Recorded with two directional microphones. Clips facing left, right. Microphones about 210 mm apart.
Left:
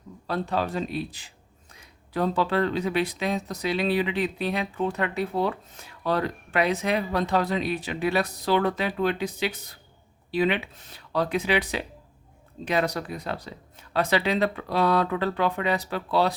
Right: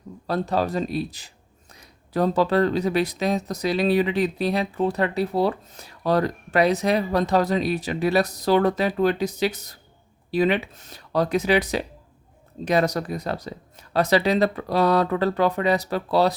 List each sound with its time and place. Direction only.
0.3 s speech: 40° right (ahead or behind)